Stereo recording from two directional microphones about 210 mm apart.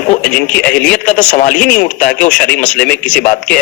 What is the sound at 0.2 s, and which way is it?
Speech, 5° left (ahead or behind).